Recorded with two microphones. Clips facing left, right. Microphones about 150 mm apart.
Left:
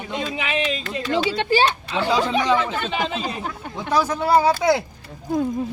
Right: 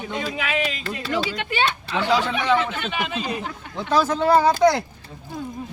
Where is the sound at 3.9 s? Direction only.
15° left (ahead or behind).